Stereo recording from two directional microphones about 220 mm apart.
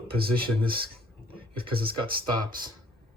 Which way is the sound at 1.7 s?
40° right (ahead or behind).